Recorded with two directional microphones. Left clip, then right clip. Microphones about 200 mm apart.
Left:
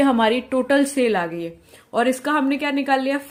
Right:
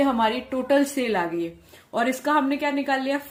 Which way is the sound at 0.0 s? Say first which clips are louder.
Left 4 dB; 40° left (ahead or behind).